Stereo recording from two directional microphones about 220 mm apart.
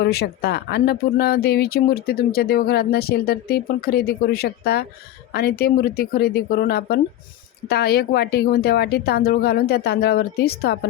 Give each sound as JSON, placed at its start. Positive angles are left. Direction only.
{"t": 0.0, "sound": "speech", "side_deg": 50}